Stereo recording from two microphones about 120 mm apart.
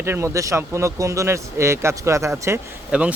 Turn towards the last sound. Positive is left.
turn(degrees=-10)  # may be behind; listen again after turning